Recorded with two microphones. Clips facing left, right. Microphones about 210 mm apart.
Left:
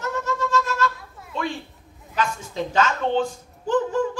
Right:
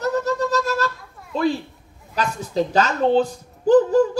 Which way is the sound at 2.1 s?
35° right (ahead or behind).